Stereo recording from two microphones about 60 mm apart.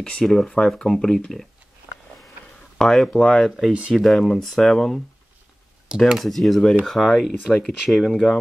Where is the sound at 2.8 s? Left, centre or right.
Centre.